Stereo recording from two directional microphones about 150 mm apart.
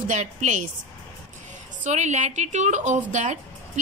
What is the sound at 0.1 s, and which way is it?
Speech, 55° right (ahead or behind).